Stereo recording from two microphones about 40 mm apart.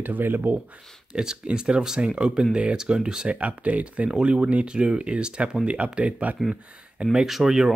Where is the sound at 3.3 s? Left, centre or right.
Right.